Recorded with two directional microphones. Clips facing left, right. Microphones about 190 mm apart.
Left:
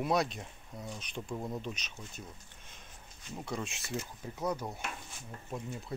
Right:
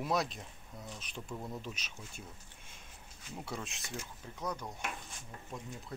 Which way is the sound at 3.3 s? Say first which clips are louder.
Left 4 dB; centre (ahead or behind).